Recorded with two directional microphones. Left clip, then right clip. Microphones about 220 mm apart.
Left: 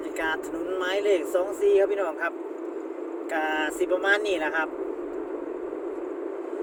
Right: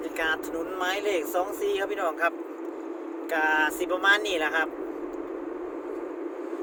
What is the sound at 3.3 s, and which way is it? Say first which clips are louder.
Speech: right 3 dB; 25° right (ahead or behind).